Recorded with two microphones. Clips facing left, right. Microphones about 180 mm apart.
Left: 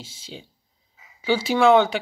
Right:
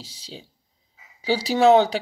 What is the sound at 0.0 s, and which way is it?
Speech, 35° right (ahead or behind).